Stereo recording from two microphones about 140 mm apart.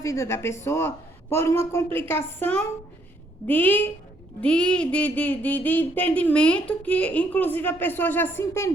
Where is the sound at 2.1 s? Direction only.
15° left (ahead or behind).